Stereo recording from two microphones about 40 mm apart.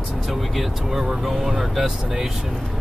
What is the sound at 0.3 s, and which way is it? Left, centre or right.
Speech, centre.